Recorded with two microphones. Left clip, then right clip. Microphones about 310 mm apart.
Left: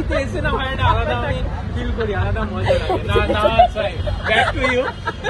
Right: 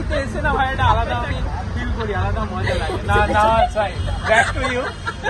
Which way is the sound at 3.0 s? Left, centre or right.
Centre.